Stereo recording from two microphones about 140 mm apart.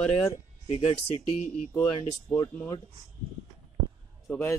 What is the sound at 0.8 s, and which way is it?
Speech, 45° left (ahead or behind).